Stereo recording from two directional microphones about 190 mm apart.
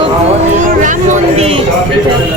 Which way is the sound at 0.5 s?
40° right (ahead or behind).